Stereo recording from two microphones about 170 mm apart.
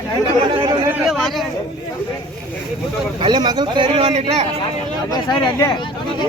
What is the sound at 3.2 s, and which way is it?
Speech, 30° right (ahead or behind).